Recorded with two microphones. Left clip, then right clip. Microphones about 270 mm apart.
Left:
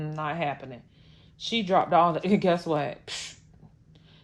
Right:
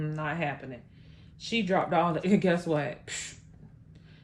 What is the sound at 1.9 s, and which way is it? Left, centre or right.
Speech, left.